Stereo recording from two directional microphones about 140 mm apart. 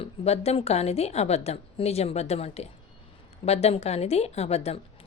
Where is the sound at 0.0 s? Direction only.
45° left (ahead or behind).